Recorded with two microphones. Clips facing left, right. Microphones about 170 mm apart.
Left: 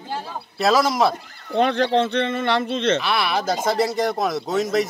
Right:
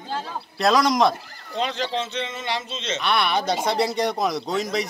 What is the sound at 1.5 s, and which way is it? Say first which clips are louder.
Speech: left 8 dB; 60° left (ahead or behind).